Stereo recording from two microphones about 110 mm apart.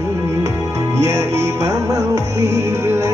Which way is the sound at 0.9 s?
25° right (ahead or behind).